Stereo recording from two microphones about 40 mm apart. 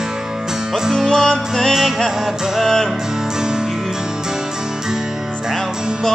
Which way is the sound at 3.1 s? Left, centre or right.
Centre.